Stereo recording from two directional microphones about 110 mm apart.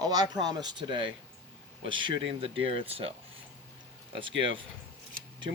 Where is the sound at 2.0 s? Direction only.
55° right (ahead or behind).